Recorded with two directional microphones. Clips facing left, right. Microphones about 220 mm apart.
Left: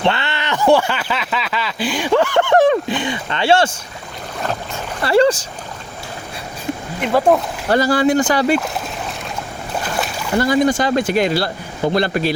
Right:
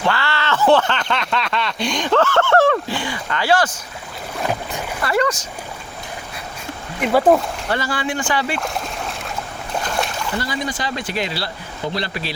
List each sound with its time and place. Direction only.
0.0 s speech: 20° left (ahead or behind)
5.0 s speech: 30° left (ahead or behind)
7.0 s speech: 5° right (ahead or behind)
7.7 s speech: 40° left (ahead or behind)
8.5 s a sound: centre (ahead or behind)
9.8 s boat: 5° left (ahead or behind)
10.3 s speech: 45° left (ahead or behind)